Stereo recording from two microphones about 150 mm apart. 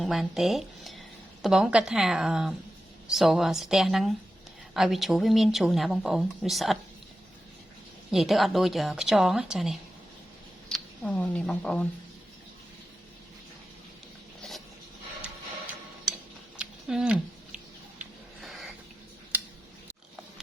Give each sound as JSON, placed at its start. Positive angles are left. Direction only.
{"t": 0.0, "sound": "speech", "side_deg": 0}
{"t": 8.1, "sound": "speech", "side_deg": 0}
{"t": 16.6, "sound": "a sound", "side_deg": -5}
{"t": 19.3, "sound": "tick-tock", "side_deg": -10}